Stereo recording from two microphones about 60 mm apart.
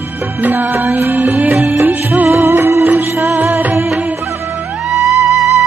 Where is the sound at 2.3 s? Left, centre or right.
Right.